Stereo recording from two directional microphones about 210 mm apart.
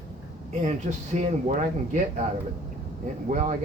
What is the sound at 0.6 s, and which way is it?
Speech, 35° right (ahead or behind).